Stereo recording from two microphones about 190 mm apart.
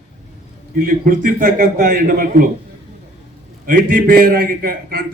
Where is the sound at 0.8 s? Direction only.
45° right (ahead or behind).